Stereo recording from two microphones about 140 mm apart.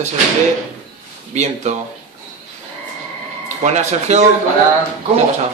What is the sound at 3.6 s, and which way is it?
Speech, 55° right (ahead or behind).